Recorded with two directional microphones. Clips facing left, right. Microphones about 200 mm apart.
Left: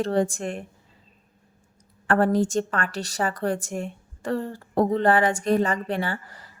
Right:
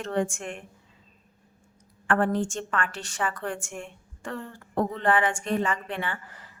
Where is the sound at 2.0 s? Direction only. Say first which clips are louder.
Left 4 dB; 40° left (ahead or behind).